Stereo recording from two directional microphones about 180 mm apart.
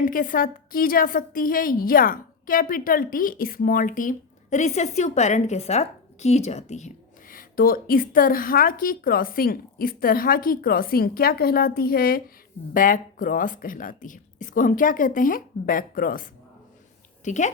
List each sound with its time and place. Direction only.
0.0 s a woman's voice: 50° left (ahead or behind)
17.2 s a woman's voice: 40° left (ahead or behind)